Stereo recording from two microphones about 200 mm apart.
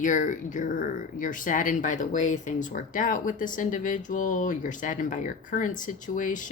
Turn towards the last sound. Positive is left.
turn(degrees=40)  # may be behind; listen again after turning